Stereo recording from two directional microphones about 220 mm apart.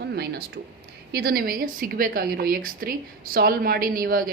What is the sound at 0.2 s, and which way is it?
A woman's voice, 45° right (ahead or behind).